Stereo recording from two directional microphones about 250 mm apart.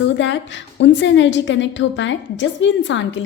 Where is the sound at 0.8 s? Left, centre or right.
Left.